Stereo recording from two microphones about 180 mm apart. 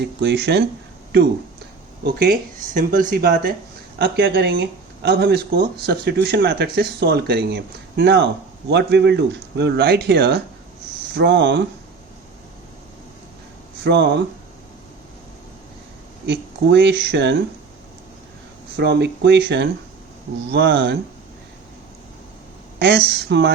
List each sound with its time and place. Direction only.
0.0 s speech: 65° right (ahead or behind)
2.0 s speech: 55° right (ahead or behind)
3.9 s speech: 75° right (ahead or behind)
13.8 s speech: 70° right (ahead or behind)
16.2 s speech: 70° right (ahead or behind)
18.8 s speech: 70° right (ahead or behind)
22.8 s speech: 65° right (ahead or behind)